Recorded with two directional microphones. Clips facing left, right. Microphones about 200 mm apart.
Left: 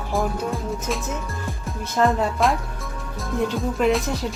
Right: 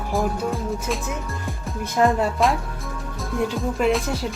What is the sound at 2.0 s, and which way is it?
Speech, centre (ahead or behind).